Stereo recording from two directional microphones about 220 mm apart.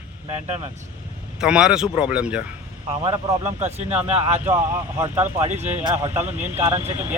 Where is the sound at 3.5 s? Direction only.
30° right (ahead or behind).